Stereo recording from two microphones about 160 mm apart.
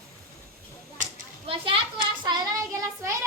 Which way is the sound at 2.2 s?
20° right (ahead or behind).